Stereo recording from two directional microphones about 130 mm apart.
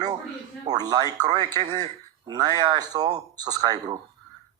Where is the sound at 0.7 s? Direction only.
30° right (ahead or behind).